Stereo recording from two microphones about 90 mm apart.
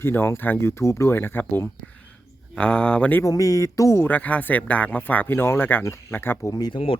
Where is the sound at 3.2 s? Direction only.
40° left (ahead or behind).